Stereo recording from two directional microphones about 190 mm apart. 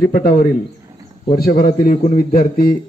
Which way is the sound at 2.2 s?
45° left (ahead or behind).